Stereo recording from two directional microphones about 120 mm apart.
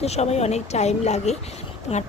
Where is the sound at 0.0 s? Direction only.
65° left (ahead or behind).